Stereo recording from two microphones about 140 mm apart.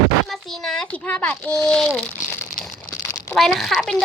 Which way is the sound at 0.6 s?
5° left (ahead or behind).